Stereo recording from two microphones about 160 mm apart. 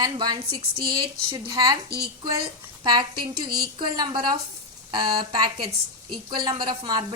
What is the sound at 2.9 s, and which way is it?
Speech, 30° right (ahead or behind).